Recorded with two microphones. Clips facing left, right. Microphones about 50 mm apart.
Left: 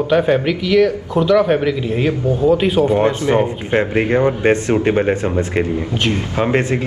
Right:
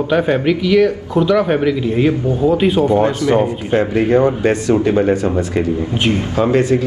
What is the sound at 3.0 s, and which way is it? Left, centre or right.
Speech, left.